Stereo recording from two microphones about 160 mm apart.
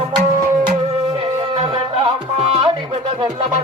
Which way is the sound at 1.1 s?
40° right (ahead or behind).